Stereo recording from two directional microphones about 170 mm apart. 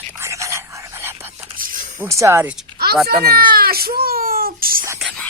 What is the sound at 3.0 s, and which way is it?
Baby cry, 65° right (ahead or behind).